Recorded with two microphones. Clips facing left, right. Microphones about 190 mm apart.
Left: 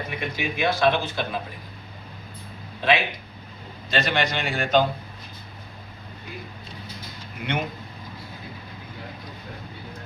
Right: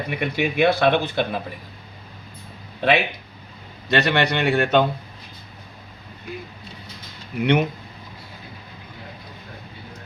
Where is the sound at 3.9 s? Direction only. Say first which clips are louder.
Right 5 dB; 65° right (ahead or behind).